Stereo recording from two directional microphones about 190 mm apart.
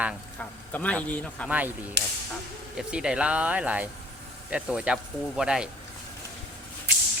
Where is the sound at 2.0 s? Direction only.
65° right (ahead or behind).